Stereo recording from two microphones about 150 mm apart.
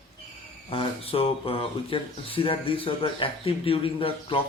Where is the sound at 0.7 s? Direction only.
40° left (ahead or behind).